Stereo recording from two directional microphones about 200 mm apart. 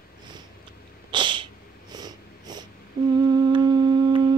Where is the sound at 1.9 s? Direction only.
20° right (ahead or behind).